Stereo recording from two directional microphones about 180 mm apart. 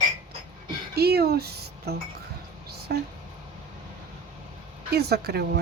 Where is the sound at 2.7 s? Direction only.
65° right (ahead or behind).